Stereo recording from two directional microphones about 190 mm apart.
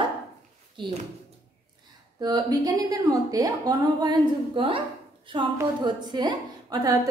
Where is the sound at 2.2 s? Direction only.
20° right (ahead or behind).